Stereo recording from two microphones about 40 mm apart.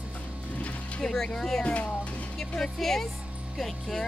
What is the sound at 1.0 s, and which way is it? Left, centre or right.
Speech, centre.